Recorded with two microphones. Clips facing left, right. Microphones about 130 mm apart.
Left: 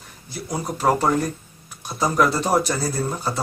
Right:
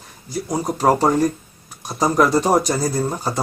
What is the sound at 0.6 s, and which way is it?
Speech, 35° right (ahead or behind).